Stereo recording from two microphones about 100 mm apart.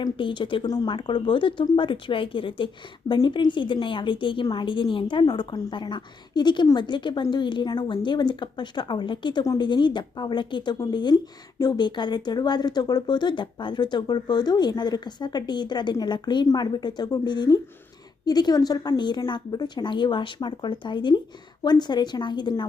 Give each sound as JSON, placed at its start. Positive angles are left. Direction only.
{"t": 0.0, "sound": "speech", "side_deg": 55}
{"t": 5.2, "sound": "speech", "side_deg": 45}